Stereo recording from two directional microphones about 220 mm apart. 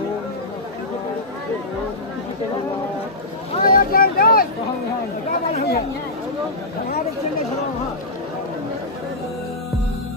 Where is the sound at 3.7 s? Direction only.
40° left (ahead or behind).